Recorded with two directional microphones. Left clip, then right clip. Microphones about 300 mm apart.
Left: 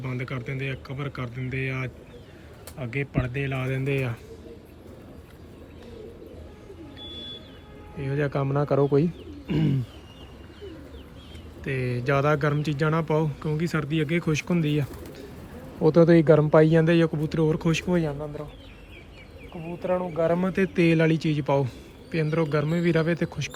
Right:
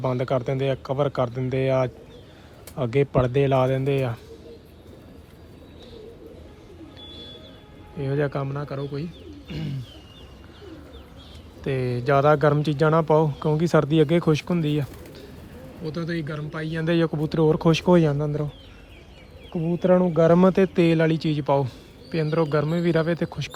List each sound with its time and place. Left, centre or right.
0.0 s speech: centre
2.9 s speech: centre
7.9 s speech: centre
9.5 s bird: centre
11.6 s speech: centre
15.8 s speech: centre
17.8 s speech: left
19.9 s speech: left
20.5 s speech: centre